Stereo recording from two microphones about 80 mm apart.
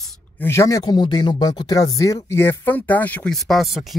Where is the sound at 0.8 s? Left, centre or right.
Left.